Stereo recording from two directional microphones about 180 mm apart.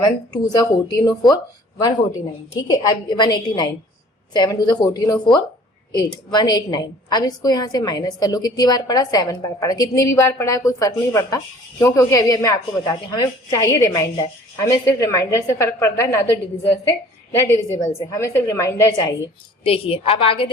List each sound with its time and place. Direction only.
0.0 s a woman's voice: 20° left (ahead or behind)
2.6 s a woman's voice: 20° left (ahead or behind)
19.6 s a woman's voice: 30° left (ahead or behind)